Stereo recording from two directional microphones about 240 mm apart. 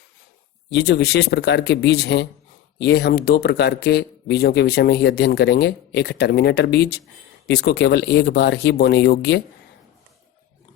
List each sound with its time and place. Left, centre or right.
0.7 s speech: left